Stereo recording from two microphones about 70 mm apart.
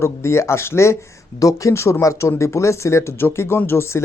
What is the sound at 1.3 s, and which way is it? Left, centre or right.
Speech, left.